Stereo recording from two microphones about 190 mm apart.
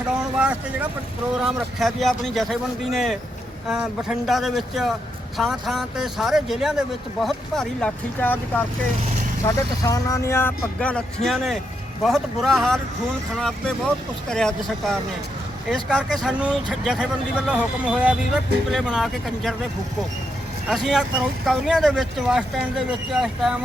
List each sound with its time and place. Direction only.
0.1 s speech: 5° right (ahead or behind)
20.7 s speech: centre (ahead or behind)